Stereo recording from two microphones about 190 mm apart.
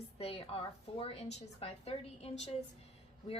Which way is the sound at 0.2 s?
30° left (ahead or behind).